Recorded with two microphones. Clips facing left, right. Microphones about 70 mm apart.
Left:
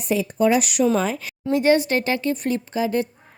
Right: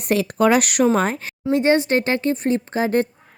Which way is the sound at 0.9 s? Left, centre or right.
Right.